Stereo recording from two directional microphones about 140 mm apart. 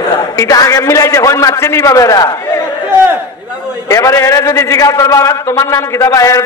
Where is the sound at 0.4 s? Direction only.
25° left (ahead or behind).